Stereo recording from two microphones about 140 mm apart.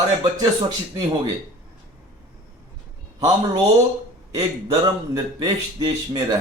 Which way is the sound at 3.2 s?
25° right (ahead or behind).